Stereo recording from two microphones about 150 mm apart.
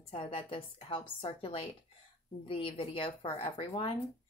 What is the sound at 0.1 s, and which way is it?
A woman's voice, 35° left (ahead or behind).